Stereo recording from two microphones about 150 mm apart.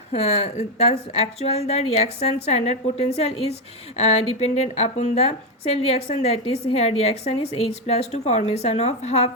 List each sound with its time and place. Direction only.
0.1 s a woman's voice: 45° left (ahead or behind)